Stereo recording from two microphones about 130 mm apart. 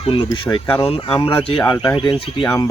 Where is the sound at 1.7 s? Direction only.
30° left (ahead or behind).